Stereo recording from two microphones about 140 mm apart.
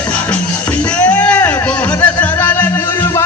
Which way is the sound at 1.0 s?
10° left (ahead or behind).